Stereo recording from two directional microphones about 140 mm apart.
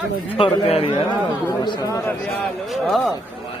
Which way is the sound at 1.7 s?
25° left (ahead or behind).